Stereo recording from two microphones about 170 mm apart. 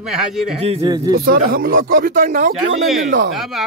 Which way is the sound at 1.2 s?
60° right (ahead or behind).